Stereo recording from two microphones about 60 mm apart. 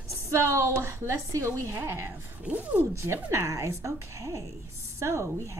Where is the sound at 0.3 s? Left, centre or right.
Right.